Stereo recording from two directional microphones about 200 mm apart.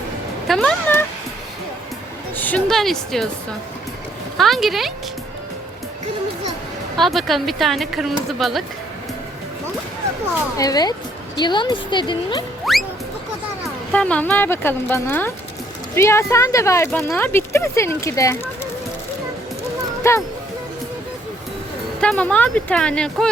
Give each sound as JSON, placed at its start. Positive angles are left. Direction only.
{"t": 0.4, "sound": "speech", "side_deg": 0}
{"t": 2.3, "sound": "speech", "side_deg": 10}
{"t": 4.4, "sound": "speech", "side_deg": 0}
{"t": 6.9, "sound": "speech", "side_deg": 0}
{"t": 10.6, "sound": "speech", "side_deg": 20}
{"t": 12.7, "sound": "speech", "side_deg": 0}
{"t": 13.9, "sound": "speech", "side_deg": 5}
{"t": 20.0, "sound": "speech", "side_deg": 15}
{"t": 22.0, "sound": "speech", "side_deg": 5}